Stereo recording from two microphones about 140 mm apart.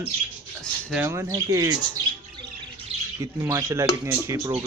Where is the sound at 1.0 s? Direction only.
20° right (ahead or behind).